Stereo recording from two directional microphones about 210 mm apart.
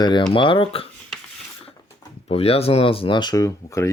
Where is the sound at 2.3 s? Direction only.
25° left (ahead or behind).